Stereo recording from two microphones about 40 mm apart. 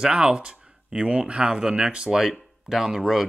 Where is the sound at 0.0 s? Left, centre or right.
Centre.